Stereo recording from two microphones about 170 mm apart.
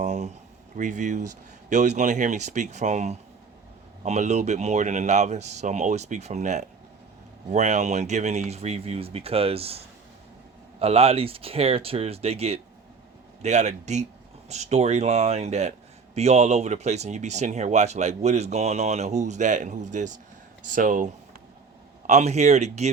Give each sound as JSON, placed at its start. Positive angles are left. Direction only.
{"t": 0.0, "sound": "speech", "side_deg": -45}